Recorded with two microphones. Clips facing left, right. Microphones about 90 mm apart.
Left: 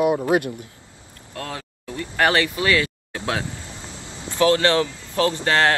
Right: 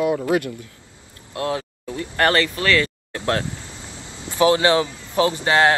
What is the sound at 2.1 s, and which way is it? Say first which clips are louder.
Speech: right 1 dB; 15° left (ahead or behind).